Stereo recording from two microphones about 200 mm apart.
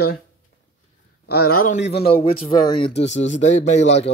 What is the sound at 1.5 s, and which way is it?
Speech, 65° left (ahead or behind).